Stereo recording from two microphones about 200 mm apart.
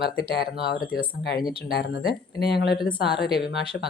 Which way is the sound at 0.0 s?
50° left (ahead or behind).